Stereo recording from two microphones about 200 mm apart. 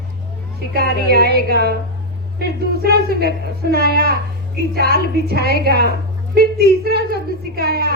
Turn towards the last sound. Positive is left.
turn(degrees=-50)  # may be behind; listen again after turning